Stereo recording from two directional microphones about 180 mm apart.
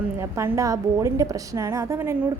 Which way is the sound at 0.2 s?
15° right (ahead or behind).